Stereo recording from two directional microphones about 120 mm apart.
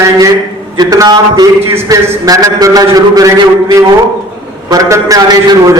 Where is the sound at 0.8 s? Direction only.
30° right (ahead or behind).